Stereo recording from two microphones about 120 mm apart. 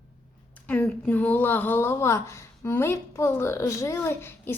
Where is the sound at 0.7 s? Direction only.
15° left (ahead or behind).